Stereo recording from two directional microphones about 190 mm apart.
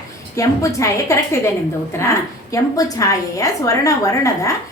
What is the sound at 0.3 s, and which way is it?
A woman's voice, 15° left (ahead or behind).